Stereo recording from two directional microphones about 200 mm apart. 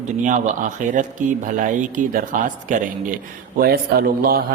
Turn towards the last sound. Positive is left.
turn(degrees=-50)  # may be behind; listen again after turning